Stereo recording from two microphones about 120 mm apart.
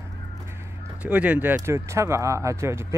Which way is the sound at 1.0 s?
15° right (ahead or behind).